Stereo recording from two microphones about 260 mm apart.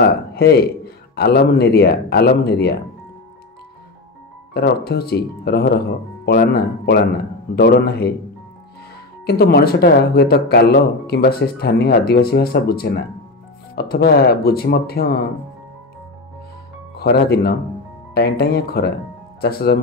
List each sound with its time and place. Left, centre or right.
0.3 s speech: left
4.6 s speech: left
9.2 s speech: left
16.9 s speech: left